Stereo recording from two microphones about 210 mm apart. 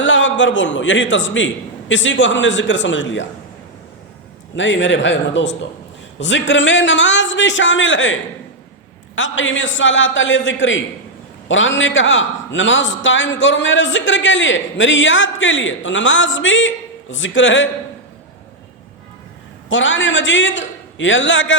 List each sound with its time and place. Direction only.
0.0 s a man's voice: 60° left (ahead or behind)
4.5 s a man's voice: 60° left (ahead or behind)
19.7 s a man's voice: 60° left (ahead or behind)